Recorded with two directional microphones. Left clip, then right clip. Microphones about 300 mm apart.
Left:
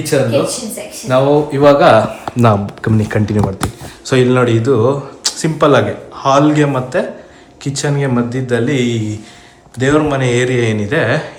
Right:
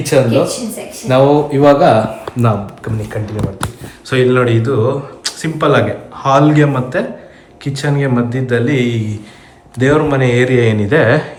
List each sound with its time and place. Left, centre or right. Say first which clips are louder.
0.0 s speech: right 2 dB; centre
2.3 s speech: left 6 dB; left
4.0 s speech: even; centre